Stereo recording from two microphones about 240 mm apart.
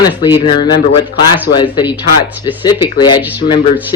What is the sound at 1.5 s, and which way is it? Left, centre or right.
Speech, centre.